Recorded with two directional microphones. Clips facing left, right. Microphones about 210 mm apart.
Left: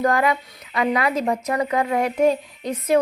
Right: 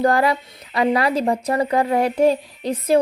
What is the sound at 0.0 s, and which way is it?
A woman's voice, 35° right (ahead or behind).